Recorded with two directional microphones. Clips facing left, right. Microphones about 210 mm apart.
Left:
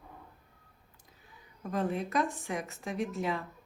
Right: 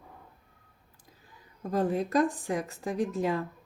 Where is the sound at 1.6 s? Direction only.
40° right (ahead or behind).